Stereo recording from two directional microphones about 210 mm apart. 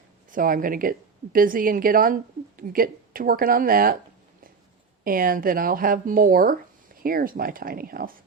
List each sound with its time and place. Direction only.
0.3 s a woman's voice: 40° right (ahead or behind)
5.0 s speech: 40° right (ahead or behind)